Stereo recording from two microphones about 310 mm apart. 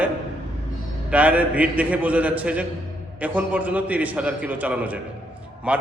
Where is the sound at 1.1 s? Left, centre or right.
Centre.